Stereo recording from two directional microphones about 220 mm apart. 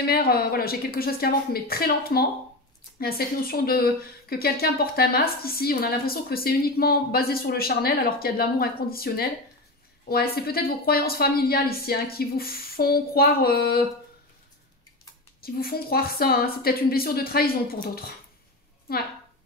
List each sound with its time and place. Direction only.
0.0 s speech: 45° left (ahead or behind)
15.4 s speech: 45° left (ahead or behind)